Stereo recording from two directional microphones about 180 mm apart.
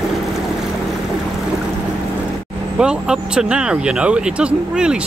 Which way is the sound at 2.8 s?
5° right (ahead or behind).